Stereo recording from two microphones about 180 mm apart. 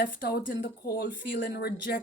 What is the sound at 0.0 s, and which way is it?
Speech, 60° left (ahead or behind).